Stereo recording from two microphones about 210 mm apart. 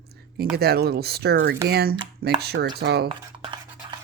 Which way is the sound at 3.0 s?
25° right (ahead or behind).